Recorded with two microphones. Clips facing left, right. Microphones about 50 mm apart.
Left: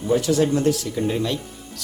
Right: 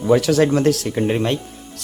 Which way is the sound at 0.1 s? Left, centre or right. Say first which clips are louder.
Right 4 dB; right.